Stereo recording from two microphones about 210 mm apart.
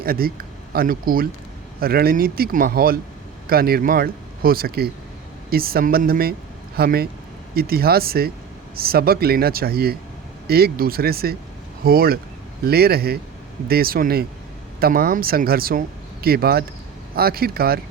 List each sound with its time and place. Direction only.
0.0 s speech: 45° right (ahead or behind)